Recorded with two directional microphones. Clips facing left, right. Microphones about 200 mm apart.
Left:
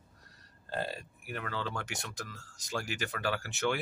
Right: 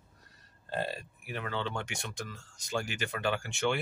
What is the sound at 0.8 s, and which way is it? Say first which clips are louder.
Speech: right 1 dB; centre (ahead or behind).